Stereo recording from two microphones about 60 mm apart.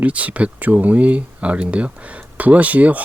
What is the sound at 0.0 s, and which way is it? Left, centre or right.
Speech, right.